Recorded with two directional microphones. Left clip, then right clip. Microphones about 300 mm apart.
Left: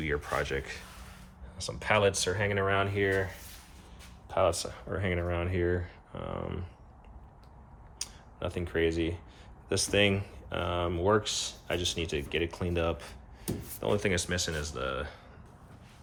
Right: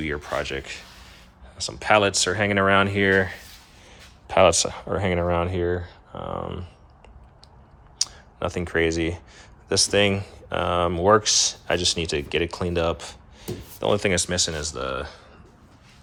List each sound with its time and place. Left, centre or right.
0.0 s speech: centre
4.3 s speech: right
7.9 s a sound: centre
9.0 s speech: centre